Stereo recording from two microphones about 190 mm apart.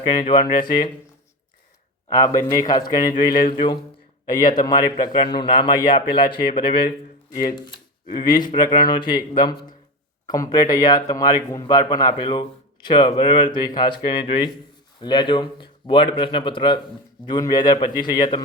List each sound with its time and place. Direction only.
0.1 s a man's voice: 25° left (ahead or behind)
2.0 s a man's voice: 20° left (ahead or behind)
8.1 s a man's voice: 25° left (ahead or behind)